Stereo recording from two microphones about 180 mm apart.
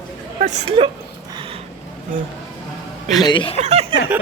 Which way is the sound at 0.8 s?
30° right (ahead or behind).